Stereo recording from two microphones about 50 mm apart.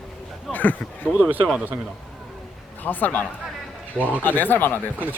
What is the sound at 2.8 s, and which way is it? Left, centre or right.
A man's voice, left.